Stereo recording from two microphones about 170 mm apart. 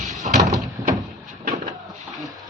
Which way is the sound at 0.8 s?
20° right (ahead or behind).